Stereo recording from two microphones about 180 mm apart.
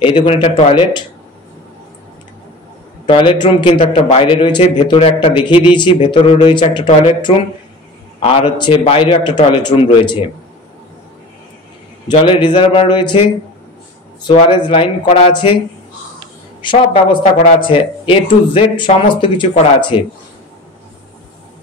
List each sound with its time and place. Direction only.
0.0 s a man's voice: 30° left (ahead or behind)
3.1 s a man's voice: 30° left (ahead or behind)
12.1 s a man's voice: 25° left (ahead or behind)
14.3 s a man's voice: 30° left (ahead or behind)
16.6 s a man's voice: 25° left (ahead or behind)